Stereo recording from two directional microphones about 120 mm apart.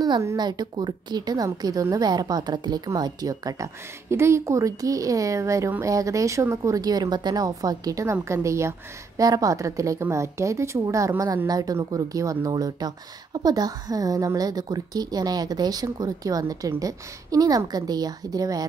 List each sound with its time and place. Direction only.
0.0 s a woman's voice: 30° right (ahead or behind)